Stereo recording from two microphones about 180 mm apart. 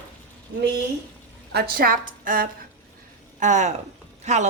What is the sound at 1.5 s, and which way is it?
A woman's voice, 60° right (ahead or behind).